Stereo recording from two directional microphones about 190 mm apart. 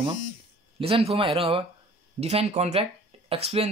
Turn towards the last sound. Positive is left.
turn(degrees=-30)  # may be behind; listen again after turning